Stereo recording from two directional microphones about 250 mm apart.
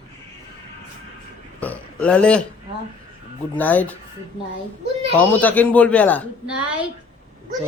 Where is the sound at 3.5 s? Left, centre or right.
Centre.